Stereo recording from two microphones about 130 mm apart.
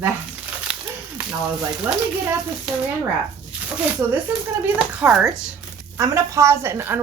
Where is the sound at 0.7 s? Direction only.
5° right (ahead or behind).